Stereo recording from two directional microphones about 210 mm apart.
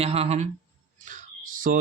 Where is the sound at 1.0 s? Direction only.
40° right (ahead or behind).